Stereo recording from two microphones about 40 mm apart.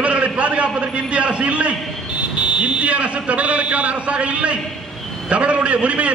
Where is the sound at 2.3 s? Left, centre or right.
Right.